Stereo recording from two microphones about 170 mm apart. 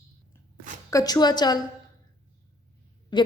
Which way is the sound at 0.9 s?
20° left (ahead or behind).